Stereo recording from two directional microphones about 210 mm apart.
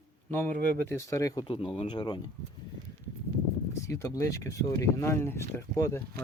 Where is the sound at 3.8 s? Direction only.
15° left (ahead or behind).